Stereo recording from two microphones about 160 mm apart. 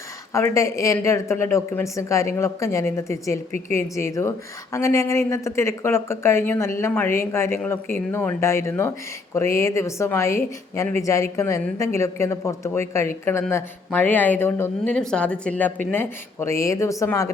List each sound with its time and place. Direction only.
0.3 s speech: 20° left (ahead or behind)